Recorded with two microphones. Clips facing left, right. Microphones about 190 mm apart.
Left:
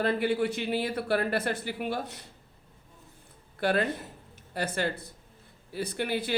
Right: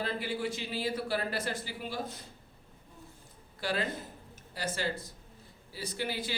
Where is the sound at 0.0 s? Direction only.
60° left (ahead or behind).